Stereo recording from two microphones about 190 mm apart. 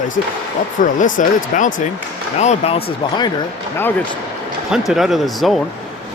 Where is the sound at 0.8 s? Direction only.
40° left (ahead or behind); by 3.3 s 25° left (ahead or behind).